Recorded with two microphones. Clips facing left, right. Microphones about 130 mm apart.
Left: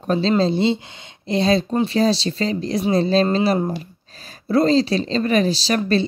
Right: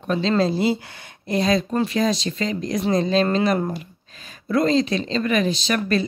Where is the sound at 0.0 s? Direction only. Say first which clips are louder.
Left 2 dB; 35° left (ahead or behind).